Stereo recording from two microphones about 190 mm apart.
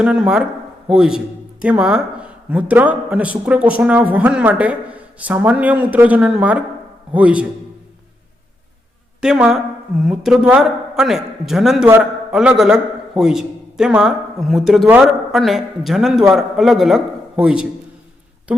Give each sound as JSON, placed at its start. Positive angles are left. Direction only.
{"t": 0.0, "sound": "a man's voice", "side_deg": -5}
{"t": 9.2, "sound": "a man's voice", "side_deg": -5}